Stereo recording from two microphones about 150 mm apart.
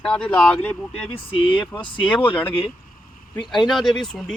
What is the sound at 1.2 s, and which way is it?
Speech, 35° left (ahead or behind).